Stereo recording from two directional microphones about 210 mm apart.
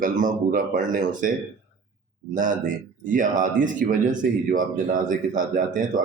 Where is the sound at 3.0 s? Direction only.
40° right (ahead or behind).